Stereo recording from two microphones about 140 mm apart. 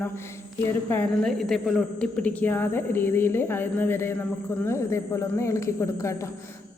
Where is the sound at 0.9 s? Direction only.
5° left (ahead or behind).